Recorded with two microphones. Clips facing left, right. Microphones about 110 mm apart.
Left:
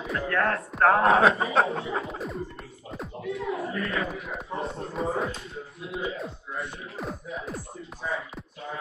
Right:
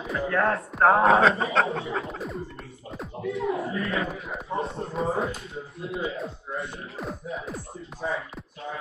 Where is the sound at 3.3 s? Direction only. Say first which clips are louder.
Right 3 dB; 30° right (ahead or behind).